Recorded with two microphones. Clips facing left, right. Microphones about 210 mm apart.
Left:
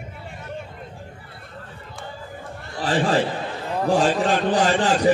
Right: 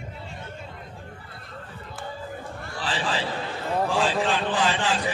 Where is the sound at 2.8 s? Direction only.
50° left (ahead or behind).